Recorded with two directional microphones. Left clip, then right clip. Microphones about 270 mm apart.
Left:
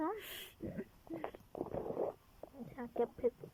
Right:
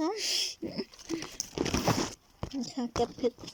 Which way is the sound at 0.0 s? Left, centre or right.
Centre.